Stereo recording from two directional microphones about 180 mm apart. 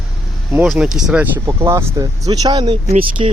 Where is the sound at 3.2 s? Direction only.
35° right (ahead or behind).